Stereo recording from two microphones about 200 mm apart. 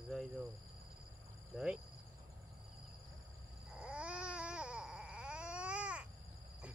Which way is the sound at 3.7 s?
5° right (ahead or behind).